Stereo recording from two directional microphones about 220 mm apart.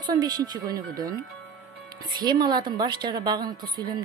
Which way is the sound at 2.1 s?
20° right (ahead or behind).